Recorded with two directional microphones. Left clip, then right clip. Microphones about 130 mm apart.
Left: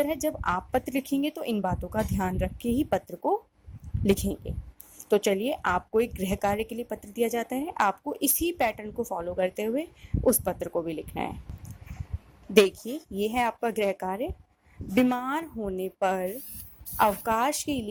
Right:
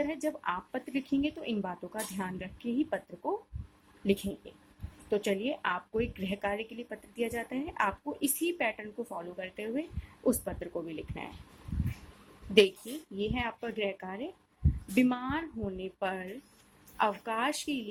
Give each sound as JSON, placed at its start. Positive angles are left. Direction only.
{"t": 0.0, "sound": "a woman's voice", "side_deg": 45}
{"t": 13.1, "sound": "a woman's voice", "side_deg": 60}